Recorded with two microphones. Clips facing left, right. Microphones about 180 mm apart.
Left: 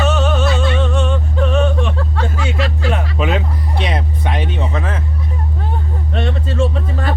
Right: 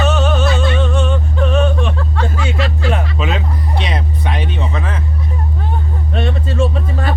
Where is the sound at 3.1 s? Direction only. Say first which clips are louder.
Left 2 dB; 55° left (ahead or behind).